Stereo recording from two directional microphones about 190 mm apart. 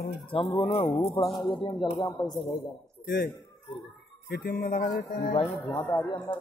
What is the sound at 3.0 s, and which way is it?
Speech, 60° left (ahead or behind).